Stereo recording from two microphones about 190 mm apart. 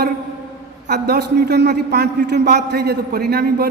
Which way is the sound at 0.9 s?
60° right (ahead or behind).